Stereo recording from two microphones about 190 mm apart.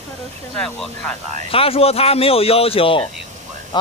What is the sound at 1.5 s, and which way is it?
Speech, 30° left (ahead or behind).